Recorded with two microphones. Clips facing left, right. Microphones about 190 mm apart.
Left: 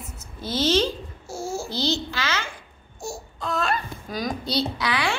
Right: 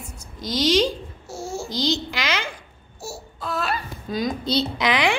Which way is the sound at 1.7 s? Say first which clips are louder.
Right 4 dB; 15° right (ahead or behind).